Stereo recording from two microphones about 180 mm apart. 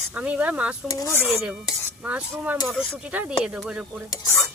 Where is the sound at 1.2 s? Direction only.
5° right (ahead or behind).